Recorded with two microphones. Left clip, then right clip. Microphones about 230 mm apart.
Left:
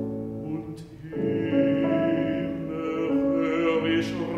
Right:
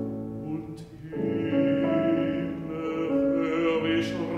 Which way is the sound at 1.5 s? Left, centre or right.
Left.